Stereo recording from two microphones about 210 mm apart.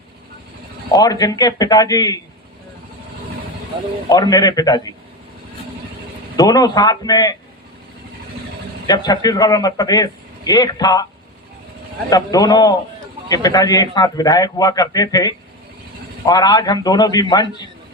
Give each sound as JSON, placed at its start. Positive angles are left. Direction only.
{"t": 0.9, "sound": "a man's voice", "side_deg": 20}
{"t": 3.7, "sound": "speech", "side_deg": -20}
{"t": 4.1, "sound": "a man's voice", "side_deg": 20}
{"t": 6.3, "sound": "a man's voice", "side_deg": 15}
{"t": 8.9, "sound": "a man's voice", "side_deg": 20}
{"t": 12.1, "sound": "a man's voice", "side_deg": 20}